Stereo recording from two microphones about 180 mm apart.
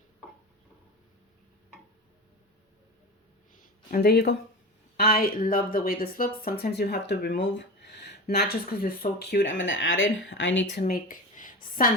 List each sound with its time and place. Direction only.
3.9 s a woman's voice: 60° left (ahead or behind); by 10.8 s 85° left
10.8 s a woman's voice: 50° left (ahead or behind)